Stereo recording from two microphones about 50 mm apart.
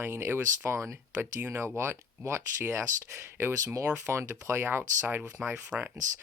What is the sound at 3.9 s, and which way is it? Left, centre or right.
Speech, right.